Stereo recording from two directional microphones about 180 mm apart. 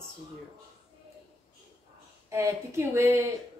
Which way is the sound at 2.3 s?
15° right (ahead or behind).